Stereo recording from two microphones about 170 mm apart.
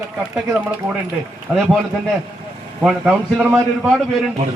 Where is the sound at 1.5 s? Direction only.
5° right (ahead or behind).